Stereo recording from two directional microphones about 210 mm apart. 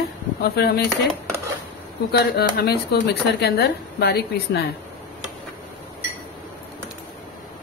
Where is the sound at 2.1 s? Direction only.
50° left (ahead or behind).